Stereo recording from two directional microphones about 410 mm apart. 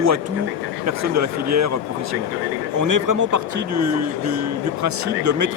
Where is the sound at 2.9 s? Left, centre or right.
Right.